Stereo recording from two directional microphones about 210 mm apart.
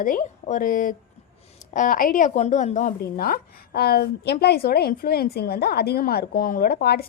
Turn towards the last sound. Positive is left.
turn(degrees=50)  # may be behind; listen again after turning